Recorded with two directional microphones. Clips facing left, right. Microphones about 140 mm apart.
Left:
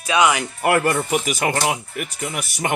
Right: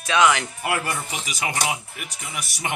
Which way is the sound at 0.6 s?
55° left (ahead or behind).